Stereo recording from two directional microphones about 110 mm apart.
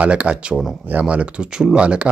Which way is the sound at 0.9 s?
15° right (ahead or behind).